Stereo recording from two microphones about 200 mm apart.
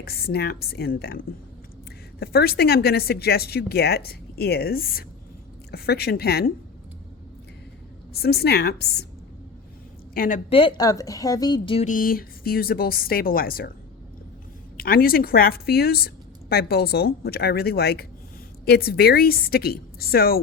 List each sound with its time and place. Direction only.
0.0 s a woman's voice: 50° left (ahead or behind)
8.1 s a woman's voice: 50° left (ahead or behind)
10.2 s a woman's voice: 40° left (ahead or behind)
10.5 s a woman's voice: 25° left (ahead or behind)
11.9 s a woman's voice: 45° left (ahead or behind)
14.8 s a woman's voice: 50° left (ahead or behind)